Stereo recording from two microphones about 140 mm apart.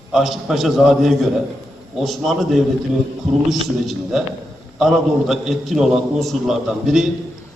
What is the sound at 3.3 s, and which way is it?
Speech, 55° right (ahead or behind).